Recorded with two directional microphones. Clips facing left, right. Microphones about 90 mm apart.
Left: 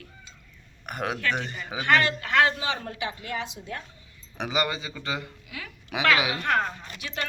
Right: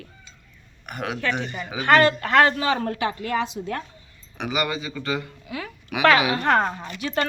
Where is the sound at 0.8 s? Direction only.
40° left (ahead or behind).